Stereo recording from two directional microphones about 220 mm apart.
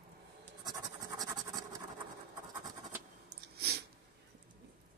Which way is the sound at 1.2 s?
15° right (ahead or behind).